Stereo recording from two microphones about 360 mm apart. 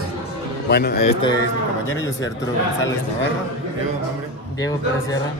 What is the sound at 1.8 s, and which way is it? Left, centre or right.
Speech, centre.